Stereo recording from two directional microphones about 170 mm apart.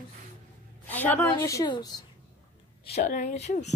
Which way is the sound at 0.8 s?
10° left (ahead or behind).